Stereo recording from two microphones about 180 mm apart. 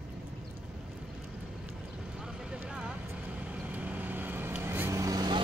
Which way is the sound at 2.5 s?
5° right (ahead or behind).